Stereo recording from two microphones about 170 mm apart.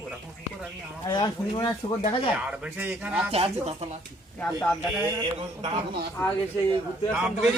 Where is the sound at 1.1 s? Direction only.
25° left (ahead or behind).